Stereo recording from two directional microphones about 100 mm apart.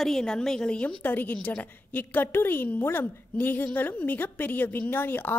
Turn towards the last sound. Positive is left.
turn(degrees=20)  # may be behind; listen again after turning